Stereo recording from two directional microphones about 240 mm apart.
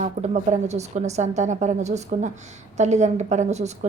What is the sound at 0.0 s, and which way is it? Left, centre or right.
A woman's voice, right.